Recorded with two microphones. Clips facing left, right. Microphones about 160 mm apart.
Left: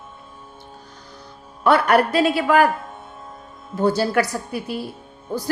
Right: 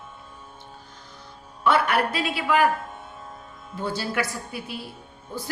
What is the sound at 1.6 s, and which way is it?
A woman's voice, 40° left (ahead or behind).